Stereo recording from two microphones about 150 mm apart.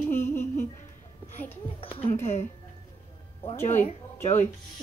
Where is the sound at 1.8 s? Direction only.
35° left (ahead or behind).